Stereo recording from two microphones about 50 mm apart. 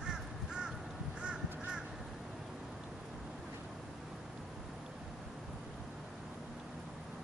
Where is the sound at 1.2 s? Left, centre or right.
Centre.